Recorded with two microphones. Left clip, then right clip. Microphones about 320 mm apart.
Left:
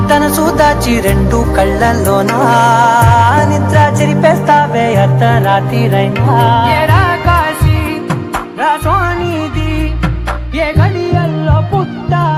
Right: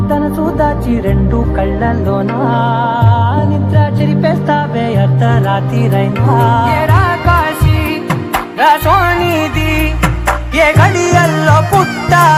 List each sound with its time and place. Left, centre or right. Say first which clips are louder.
0.1 s music: left 5 dB; left
3.3 s music: left 6 dB; left; by 7.5 s centre
8.6 s music: right 3 dB; centre
10.6 s music: right 5 dB; right